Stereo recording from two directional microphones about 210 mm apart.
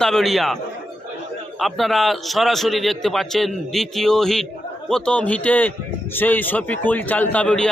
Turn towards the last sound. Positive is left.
turn(degrees=5)  # may be behind; listen again after turning